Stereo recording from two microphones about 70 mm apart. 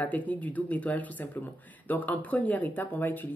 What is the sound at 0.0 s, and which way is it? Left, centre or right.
Speech, left.